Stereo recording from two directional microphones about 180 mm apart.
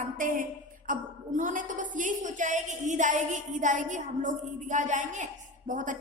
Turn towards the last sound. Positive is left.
turn(degrees=-45)  # may be behind; listen again after turning